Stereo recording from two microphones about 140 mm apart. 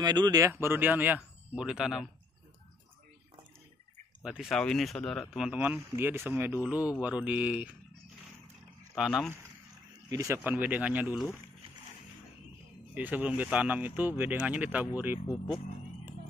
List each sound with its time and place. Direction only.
0.0 s speech: 30° right (ahead or behind); by 2.0 s 5° right (ahead or behind)
4.2 s speech: 5° right (ahead or behind)
5.6 s speech: 15° right (ahead or behind)
8.9 s speech: 5° right (ahead or behind)
10.0 s speech: 25° right (ahead or behind)
10.4 s speech: 10° right (ahead or behind)
12.9 s speech: 10° right (ahead or behind)